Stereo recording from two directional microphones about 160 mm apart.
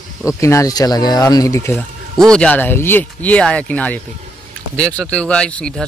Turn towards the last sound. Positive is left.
turn(degrees=5)  # may be behind; listen again after turning